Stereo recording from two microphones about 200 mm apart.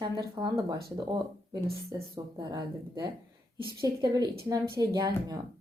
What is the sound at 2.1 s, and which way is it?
Speech, 20° right (ahead or behind).